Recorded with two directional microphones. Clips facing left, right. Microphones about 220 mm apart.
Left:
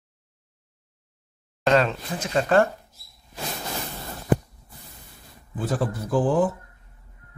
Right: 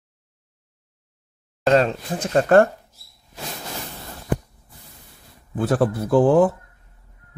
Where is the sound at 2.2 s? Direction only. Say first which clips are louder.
Right 5 dB; 50° right (ahead or behind).